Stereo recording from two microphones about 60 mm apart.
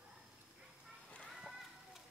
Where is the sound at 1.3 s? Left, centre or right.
Centre.